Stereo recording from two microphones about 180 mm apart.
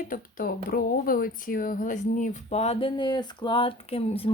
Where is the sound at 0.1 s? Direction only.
50° left (ahead or behind).